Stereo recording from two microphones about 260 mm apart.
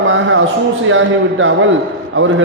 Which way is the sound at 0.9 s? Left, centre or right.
Right.